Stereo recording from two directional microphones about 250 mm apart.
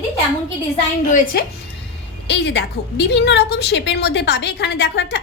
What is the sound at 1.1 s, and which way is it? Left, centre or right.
A woman's voice, left.